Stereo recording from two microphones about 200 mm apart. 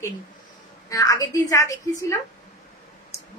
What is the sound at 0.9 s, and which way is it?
A woman's voice, 15° left (ahead or behind).